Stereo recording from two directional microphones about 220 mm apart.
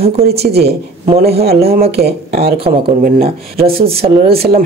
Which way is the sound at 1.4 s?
45° right (ahead or behind).